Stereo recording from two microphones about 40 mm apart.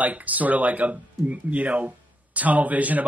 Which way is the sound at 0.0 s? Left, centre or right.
Right.